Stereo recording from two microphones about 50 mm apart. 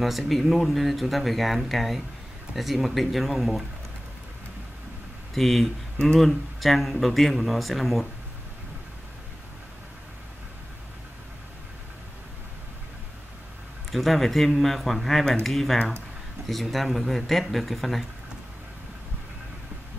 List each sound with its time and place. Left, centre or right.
0.0 s speech: centre
5.3 s speech: centre
13.9 s speech: centre